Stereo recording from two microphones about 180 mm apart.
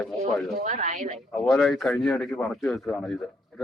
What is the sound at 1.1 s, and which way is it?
A man's voice, centre (ahead or behind).